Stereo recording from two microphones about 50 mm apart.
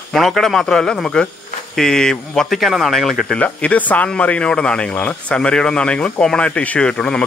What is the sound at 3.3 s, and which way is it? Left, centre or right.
Speech, left.